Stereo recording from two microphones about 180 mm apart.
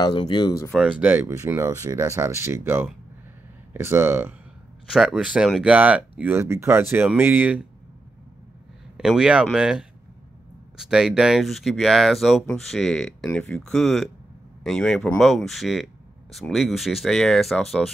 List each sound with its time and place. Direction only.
0.0 s speech: 25° left (ahead or behind)
0.7 s speech: 5° right (ahead or behind)
4.8 s speech: centre (ahead or behind)
8.9 s speech: 5° right (ahead or behind)